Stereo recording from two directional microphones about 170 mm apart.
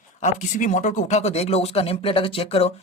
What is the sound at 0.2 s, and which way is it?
Speech, 45° left (ahead or behind).